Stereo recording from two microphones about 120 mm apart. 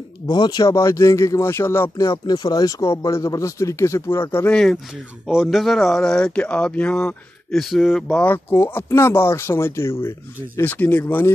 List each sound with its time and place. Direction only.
0.3 s speech: 35° left (ahead or behind); by 4.6 s 20° left (ahead or behind)
5.2 s speech: centre (ahead or behind)
8.2 s speech: 15° left (ahead or behind)